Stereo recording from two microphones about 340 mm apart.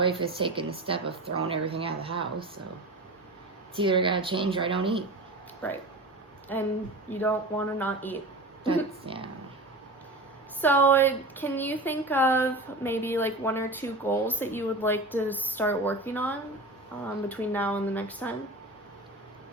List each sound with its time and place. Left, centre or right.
0.0 s speech: centre
3.8 s speech: centre
5.6 s speech: centre
8.6 s speech: centre
10.6 s speech: centre